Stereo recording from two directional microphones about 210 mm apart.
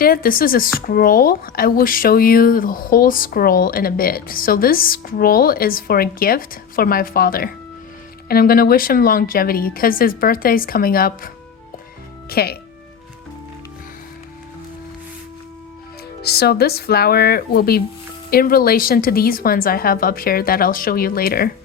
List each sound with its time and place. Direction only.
0.0 s speech: 45° left (ahead or behind)
12.3 s speech: 50° left (ahead or behind)
16.2 s speech: 50° left (ahead or behind)